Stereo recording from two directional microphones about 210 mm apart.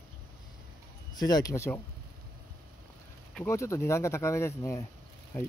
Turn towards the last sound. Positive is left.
turn(degrees=15)  # may be behind; listen again after turning